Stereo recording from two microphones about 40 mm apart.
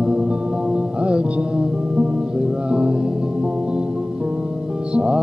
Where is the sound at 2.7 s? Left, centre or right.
Right.